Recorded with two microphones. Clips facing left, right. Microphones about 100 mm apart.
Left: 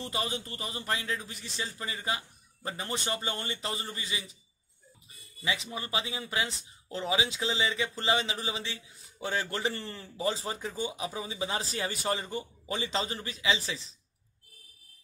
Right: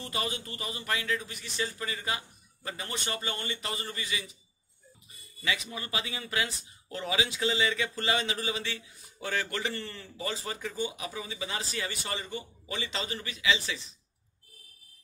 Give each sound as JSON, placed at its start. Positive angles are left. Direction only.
{"t": 0.0, "sound": "speech", "side_deg": 25}
{"t": 5.4, "sound": "speech", "side_deg": 25}